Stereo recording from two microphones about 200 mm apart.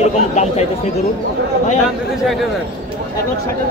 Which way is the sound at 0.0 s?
35° left (ahead or behind).